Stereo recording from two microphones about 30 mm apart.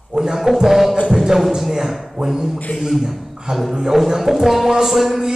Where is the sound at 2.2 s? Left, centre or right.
Centre.